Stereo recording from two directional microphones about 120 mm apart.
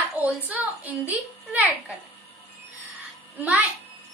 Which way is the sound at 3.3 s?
15° right (ahead or behind).